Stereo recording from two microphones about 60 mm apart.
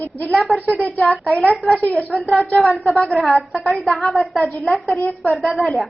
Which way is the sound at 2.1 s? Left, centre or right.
Centre.